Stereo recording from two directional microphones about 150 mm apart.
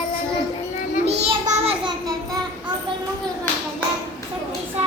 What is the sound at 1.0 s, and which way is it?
Child singing, 45° right (ahead or behind).